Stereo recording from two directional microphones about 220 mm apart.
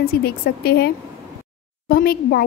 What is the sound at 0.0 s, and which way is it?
A woman's voice, 45° left (ahead or behind).